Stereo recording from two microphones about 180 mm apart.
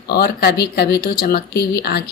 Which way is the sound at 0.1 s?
60° left (ahead or behind).